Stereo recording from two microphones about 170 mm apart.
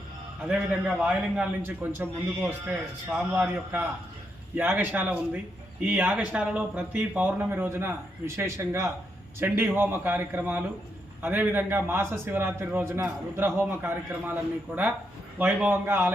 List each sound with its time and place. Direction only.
0.4 s a man's voice: 5° right (ahead or behind)
15.4 s a man's voice: 10° right (ahead or behind)